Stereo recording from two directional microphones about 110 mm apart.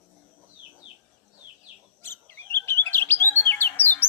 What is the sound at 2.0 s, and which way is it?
Chirp, 20° left (ahead or behind).